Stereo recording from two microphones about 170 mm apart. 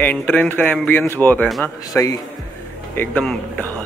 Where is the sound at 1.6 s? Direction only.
20° left (ahead or behind).